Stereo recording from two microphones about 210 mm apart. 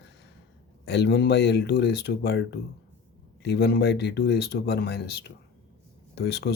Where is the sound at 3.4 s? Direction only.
50° left (ahead or behind).